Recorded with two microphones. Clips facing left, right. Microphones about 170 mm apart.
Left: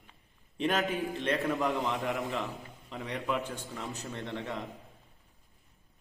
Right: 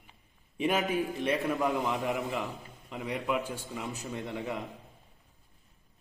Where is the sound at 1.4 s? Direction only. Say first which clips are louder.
Even; 20° right (ahead or behind).